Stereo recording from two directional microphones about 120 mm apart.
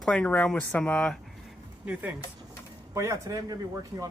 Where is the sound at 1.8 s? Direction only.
10° right (ahead or behind).